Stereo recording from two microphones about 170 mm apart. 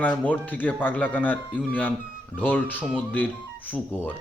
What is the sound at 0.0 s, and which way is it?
Speech, 10° left (ahead or behind).